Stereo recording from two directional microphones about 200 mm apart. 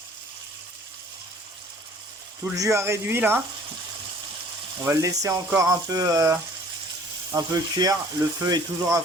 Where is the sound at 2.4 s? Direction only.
15° right (ahead or behind).